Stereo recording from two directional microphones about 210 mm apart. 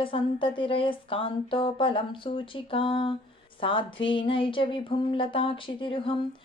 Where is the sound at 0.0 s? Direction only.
25° left (ahead or behind).